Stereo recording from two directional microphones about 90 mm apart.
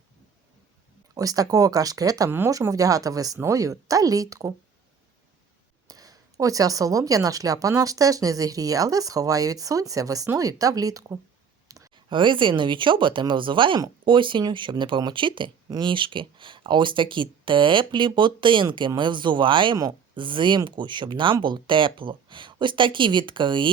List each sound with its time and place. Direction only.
1.1 s speech: 45° right (ahead or behind)
5.9 s speech: 40° right (ahead or behind)
11.7 s clicking: 40° right (ahead or behind)
12.0 s speech: 65° right (ahead or behind)